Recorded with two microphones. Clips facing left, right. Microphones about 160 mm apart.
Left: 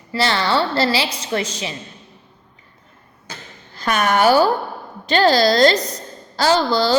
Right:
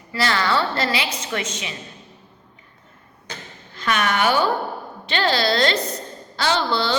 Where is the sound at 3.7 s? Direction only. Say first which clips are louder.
Left 4 dB; 40° left (ahead or behind).